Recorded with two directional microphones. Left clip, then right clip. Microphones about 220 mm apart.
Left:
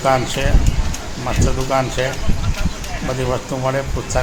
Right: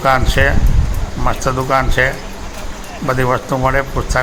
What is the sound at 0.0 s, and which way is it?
Speech, 15° right (ahead or behind).